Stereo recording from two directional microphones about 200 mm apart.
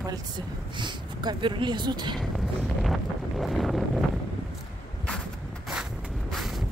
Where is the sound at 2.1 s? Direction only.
Centre (ahead or behind).